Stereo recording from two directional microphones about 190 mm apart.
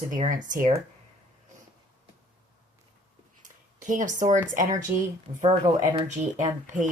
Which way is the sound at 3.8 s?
40° right (ahead or behind).